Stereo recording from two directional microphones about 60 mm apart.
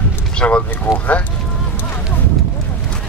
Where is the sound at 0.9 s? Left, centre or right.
Left.